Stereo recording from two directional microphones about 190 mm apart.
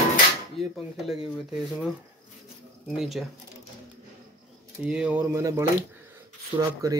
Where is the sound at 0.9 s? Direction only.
Centre (ahead or behind).